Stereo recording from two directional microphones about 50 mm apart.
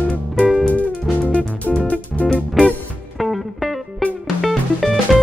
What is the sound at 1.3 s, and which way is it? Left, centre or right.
Music, left.